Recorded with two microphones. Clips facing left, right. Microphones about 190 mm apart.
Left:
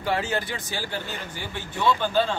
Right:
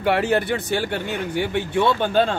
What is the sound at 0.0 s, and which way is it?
Speech, 65° right (ahead or behind).